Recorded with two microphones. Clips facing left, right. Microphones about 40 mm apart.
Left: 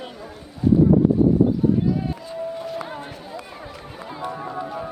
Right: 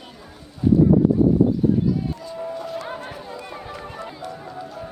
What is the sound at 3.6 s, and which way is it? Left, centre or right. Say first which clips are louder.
Run: right 3 dB; centre.